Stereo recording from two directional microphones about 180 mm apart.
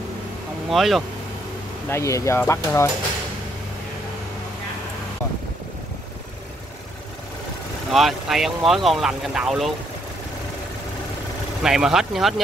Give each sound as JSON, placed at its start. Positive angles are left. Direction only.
{"t": 0.7, "sound": "speech", "side_deg": 0}
{"t": 1.9, "sound": "speech", "side_deg": 15}
{"t": 7.9, "sound": "speech", "side_deg": 0}
{"t": 11.6, "sound": "speech", "side_deg": 0}